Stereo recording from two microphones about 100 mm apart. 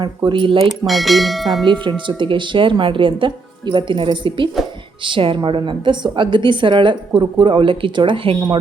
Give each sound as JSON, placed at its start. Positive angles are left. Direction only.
{"t": 0.0, "sound": "speech", "side_deg": -50}
{"t": 0.9, "sound": "speech", "side_deg": 0}
{"t": 1.6, "sound": "a woman's voice", "side_deg": -50}